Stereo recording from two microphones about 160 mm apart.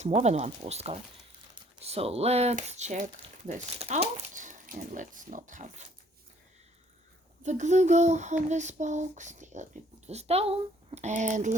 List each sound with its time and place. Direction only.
0.0 s speech: 45° right (ahead or behind)
7.4 s speech: 50° right (ahead or behind)